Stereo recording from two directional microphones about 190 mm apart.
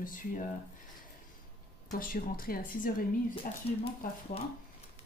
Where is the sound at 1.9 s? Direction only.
50° left (ahead or behind).